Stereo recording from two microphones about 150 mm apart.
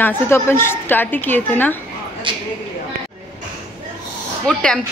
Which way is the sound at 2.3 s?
35° right (ahead or behind).